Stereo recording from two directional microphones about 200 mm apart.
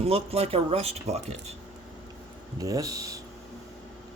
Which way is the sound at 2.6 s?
15° right (ahead or behind).